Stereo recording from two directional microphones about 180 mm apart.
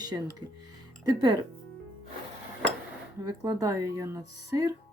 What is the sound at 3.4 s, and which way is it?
A woman's voice, 15° right (ahead or behind).